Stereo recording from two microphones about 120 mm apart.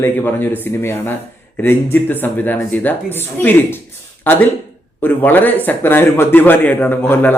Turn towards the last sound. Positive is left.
turn(degrees=15)  # may be behind; listen again after turning